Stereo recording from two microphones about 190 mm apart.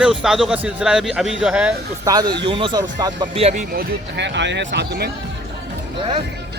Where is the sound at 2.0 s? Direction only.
20° right (ahead or behind).